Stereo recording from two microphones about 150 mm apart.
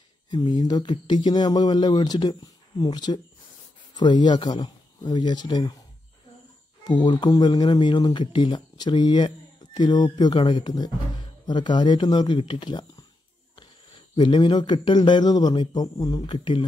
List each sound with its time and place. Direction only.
0.3 s speech: 25° left (ahead or behind)
6.8 s speech: 30° left (ahead or behind)
14.1 s speech: 30° left (ahead or behind)